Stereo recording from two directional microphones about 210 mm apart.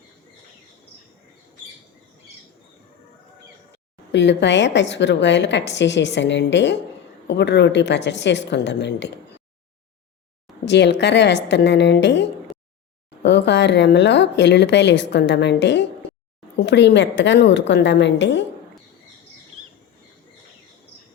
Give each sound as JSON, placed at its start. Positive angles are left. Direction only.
{"t": 4.1, "sound": "a woman's voice", "side_deg": 55}
{"t": 10.7, "sound": "a woman's voice", "side_deg": 55}